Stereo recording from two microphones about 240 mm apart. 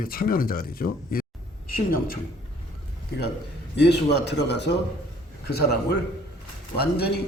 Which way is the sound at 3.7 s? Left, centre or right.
Left.